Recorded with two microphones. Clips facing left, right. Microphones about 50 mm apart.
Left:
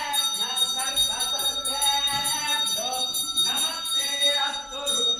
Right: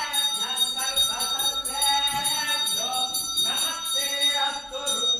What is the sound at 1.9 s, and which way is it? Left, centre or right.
Music, right.